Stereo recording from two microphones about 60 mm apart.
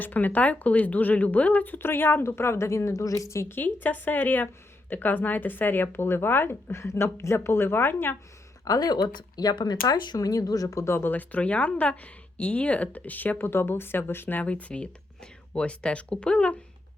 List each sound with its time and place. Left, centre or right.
0.0 s speech: left
3.5 s speech: left
8.6 s speech: left
11.1 s speech: left
13.4 s speech: left
14.4 s speech: left